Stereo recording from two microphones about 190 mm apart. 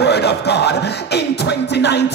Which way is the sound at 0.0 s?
60° left (ahead or behind).